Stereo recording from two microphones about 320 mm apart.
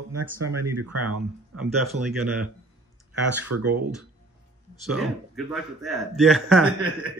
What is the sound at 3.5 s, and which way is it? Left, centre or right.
Speech, right.